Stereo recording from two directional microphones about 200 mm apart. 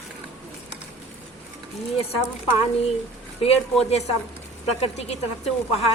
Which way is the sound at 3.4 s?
30° left (ahead or behind).